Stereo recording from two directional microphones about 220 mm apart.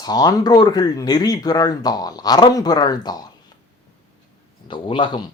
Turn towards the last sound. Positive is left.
turn(degrees=20)  # may be behind; listen again after turning